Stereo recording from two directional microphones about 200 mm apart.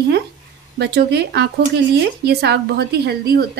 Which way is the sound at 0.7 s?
55° right (ahead or behind).